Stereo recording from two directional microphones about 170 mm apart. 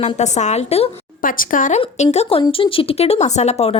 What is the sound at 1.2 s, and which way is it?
Speech, 55° left (ahead or behind).